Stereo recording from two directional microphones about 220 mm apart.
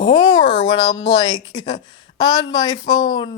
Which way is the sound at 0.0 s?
20° left (ahead or behind).